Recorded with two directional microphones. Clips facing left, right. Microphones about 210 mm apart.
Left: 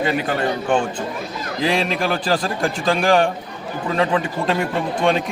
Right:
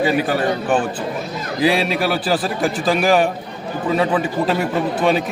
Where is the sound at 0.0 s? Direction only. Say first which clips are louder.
Right 3 dB; 5° right (ahead or behind).